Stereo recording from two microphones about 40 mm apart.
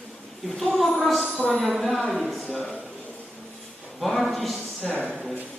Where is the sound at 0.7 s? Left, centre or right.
Centre.